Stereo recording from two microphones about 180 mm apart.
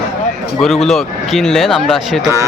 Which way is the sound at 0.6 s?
Centre (ahead or behind).